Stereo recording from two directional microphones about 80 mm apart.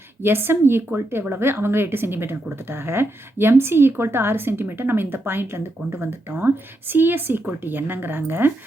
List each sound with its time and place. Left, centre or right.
0.2 s speech: right